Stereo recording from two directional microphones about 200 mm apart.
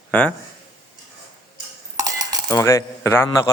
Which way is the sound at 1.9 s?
20° right (ahead or behind).